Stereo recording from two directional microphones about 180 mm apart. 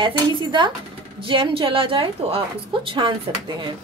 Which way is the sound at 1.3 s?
30° right (ahead or behind).